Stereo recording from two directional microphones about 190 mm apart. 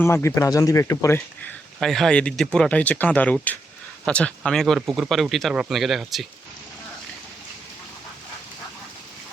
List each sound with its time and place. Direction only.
0.0 s speech: 15° left (ahead or behind)
1.8 s speech: centre (ahead or behind)